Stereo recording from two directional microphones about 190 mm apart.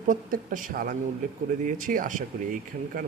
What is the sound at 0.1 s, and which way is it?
Speech, 45° right (ahead or behind).